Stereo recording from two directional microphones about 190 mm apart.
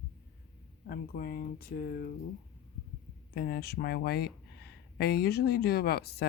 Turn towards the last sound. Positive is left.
turn(degrees=60)  # may be behind; listen again after turning